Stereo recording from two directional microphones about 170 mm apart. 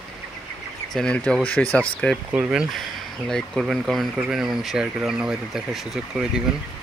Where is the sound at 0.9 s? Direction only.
5° left (ahead or behind).